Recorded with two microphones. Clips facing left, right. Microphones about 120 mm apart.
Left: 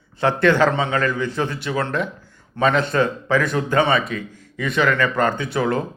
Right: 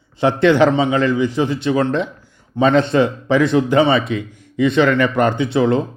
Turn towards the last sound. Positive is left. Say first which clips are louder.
# right 6 dB
turn(degrees=-25)  # may be behind; listen again after turning